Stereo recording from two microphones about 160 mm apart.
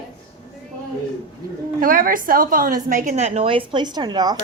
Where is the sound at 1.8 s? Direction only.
60° right (ahead or behind); by 3.6 s 40° right (ahead or behind).